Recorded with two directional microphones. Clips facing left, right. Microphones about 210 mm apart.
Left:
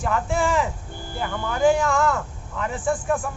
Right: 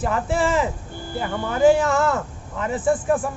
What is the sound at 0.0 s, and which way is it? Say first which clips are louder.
Speech: right 2 dB; 5° right (ahead or behind).